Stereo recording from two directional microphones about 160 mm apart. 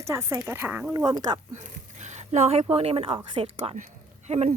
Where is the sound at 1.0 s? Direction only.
25° right (ahead or behind).